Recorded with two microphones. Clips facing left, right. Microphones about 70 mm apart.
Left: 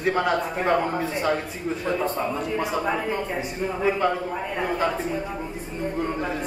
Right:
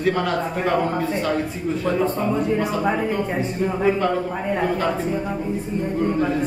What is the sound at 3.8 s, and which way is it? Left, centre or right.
Speech, centre.